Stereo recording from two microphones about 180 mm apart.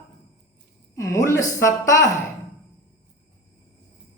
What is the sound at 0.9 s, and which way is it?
A woman's voice, 15° left (ahead or behind).